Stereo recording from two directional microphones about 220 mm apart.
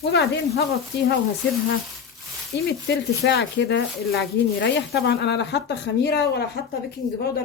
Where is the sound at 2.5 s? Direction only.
50° left (ahead or behind).